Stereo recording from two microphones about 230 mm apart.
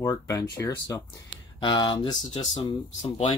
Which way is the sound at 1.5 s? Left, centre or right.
Left.